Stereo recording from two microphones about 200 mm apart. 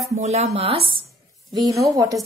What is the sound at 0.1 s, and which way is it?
Speech, 35° right (ahead or behind).